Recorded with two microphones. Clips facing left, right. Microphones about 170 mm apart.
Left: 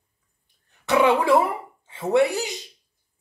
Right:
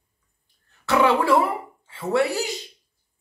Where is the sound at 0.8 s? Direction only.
20° left (ahead or behind).